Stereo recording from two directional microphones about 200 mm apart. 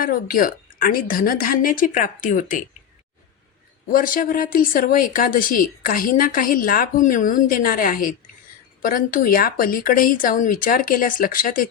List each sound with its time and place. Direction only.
0.0 s speech: 45° left (ahead or behind)
3.8 s speech: 45° left (ahead or behind)